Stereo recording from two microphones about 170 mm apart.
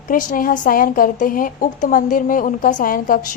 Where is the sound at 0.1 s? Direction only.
55° left (ahead or behind).